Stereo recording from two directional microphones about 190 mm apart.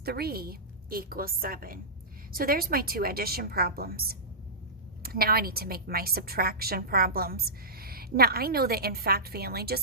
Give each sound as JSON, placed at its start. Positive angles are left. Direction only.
{"t": 0.0, "sound": "a woman's voice", "side_deg": -55}